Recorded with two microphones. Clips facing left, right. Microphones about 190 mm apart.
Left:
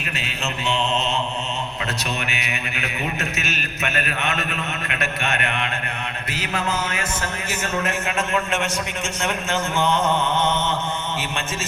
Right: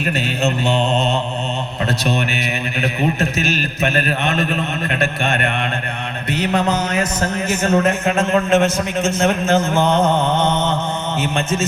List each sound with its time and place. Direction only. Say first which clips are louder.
0.4 s a man's voice: right 6 dB; 40° right (ahead or behind)
10.3 s mantra: right 4 dB; 15° right (ahead or behind)